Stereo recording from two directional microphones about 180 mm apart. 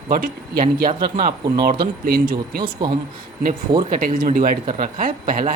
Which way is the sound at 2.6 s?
25° right (ahead or behind).